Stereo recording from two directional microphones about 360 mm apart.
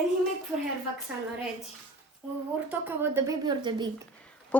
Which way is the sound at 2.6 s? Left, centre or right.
Centre.